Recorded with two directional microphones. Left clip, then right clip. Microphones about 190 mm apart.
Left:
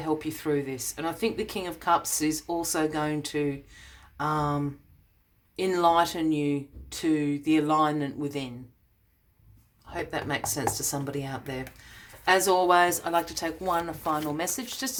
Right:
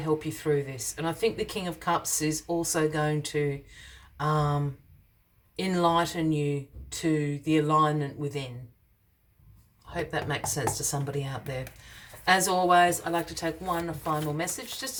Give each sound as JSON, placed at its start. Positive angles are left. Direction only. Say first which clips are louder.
{"t": 0.0, "sound": "speech", "louder": "right 1 dB", "side_deg": 30}
{"t": 10.1, "sound": "speech", "louder": "left 2 dB", "side_deg": 25}